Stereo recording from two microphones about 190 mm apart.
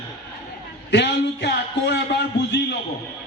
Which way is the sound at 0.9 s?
65° left (ahead or behind).